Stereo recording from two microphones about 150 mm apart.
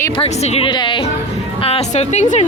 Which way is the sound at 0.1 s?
40° left (ahead or behind).